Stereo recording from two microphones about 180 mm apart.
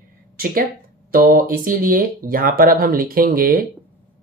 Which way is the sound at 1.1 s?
50° right (ahead or behind).